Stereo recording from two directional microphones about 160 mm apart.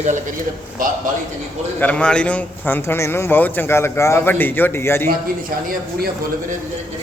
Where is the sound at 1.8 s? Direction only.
10° left (ahead or behind).